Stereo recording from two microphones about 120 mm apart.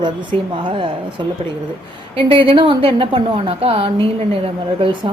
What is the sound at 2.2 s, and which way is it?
A woman's voice, 50° right (ahead or behind).